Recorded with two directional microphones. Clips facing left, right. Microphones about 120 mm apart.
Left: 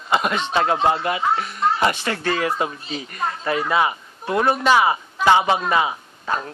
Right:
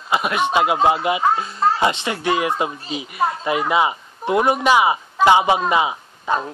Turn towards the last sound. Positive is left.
turn(degrees=-15)  # may be behind; listen again after turning